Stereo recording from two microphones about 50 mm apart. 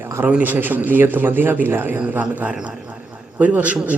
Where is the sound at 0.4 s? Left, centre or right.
Right.